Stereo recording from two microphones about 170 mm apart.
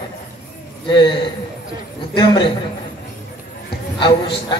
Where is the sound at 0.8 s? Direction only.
25° left (ahead or behind).